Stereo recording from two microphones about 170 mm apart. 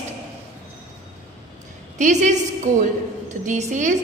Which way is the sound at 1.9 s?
45° right (ahead or behind).